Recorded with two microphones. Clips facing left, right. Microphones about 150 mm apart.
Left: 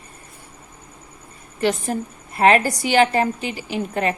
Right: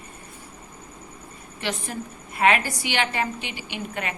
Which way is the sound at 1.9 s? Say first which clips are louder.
Left 7 dB; 45° left (ahead or behind).